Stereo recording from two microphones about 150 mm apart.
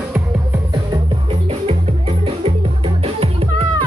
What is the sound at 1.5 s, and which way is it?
Music, 45° right (ahead or behind).